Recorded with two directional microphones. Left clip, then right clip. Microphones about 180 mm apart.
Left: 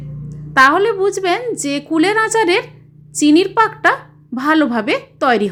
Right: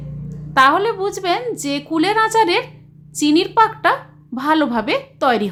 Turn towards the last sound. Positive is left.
turn(degrees=15)  # may be behind; listen again after turning